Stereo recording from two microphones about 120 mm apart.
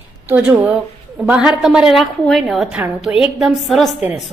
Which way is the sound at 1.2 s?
5° right (ahead or behind).